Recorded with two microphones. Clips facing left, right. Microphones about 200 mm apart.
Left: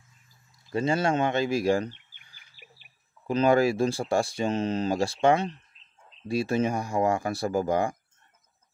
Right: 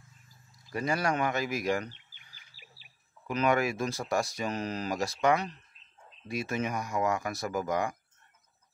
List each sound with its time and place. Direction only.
0.7 s speech: 25° left (ahead or behind)
2.0 s chirp: 55° left (ahead or behind)
3.3 s speech: 30° left (ahead or behind)